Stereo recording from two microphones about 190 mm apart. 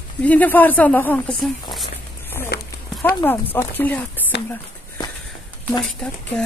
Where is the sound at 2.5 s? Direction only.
55° left (ahead or behind).